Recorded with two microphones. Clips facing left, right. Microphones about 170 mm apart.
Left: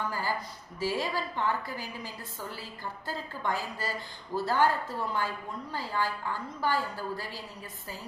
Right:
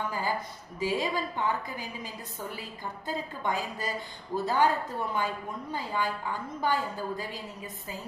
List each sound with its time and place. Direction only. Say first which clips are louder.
0.1 s a woman's voice: right 2 dB; 20° right (ahead or behind)